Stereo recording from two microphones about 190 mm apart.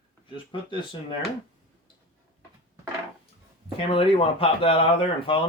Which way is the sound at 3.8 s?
30° left (ahead or behind).